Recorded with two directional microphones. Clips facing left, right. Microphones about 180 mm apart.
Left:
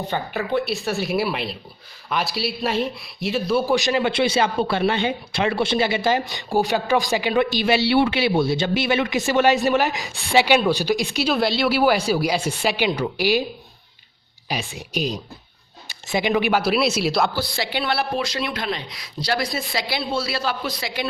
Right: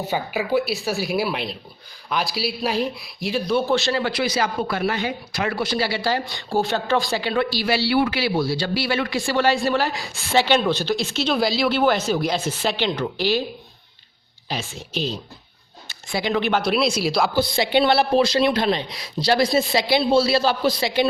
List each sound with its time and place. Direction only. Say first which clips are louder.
0.0 s a man's voice: right 1 dB; 5° right (ahead or behind)
3.8 s speech: left 2 dB; 15° left (ahead or behind)
11.3 s speech: even; centre (ahead or behind)
14.4 s a man's voice: left 1 dB; 15° left (ahead or behind); by 17.3 s centre (ahead or behind)
17.3 s a man's voice: right 7 dB; 20° right (ahead or behind)